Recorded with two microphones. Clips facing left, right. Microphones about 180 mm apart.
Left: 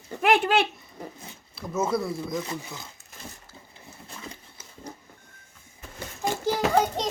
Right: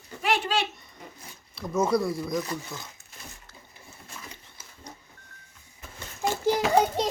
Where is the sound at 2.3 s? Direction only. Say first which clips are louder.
Right 1 dB; 25° left (ahead or behind).